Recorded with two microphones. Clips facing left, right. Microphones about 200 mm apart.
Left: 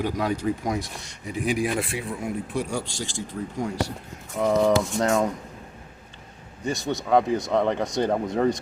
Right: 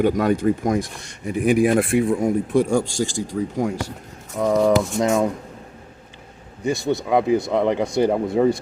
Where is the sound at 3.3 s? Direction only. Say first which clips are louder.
Right 7 dB; 65° right (ahead or behind).